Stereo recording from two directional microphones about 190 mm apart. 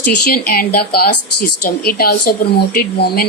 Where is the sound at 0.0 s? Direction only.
50° left (ahead or behind).